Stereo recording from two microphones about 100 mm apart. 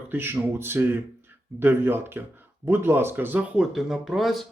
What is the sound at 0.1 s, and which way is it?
Speech, 20° right (ahead or behind).